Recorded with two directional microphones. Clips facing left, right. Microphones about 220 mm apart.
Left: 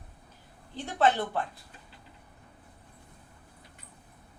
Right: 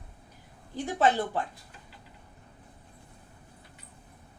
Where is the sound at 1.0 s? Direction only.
15° right (ahead or behind).